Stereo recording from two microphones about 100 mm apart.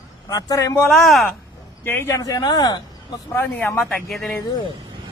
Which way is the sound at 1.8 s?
25° left (ahead or behind).